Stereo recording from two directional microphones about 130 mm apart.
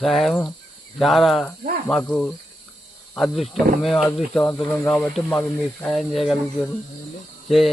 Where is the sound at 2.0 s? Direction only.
10° left (ahead or behind).